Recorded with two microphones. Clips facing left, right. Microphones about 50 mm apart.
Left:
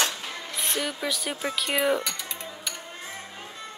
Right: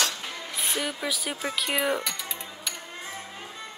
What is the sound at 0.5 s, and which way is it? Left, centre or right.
Speech, centre.